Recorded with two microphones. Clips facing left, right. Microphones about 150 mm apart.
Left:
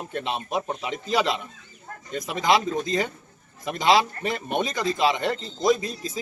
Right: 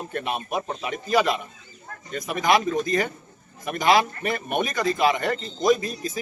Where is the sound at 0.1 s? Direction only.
20° left (ahead or behind).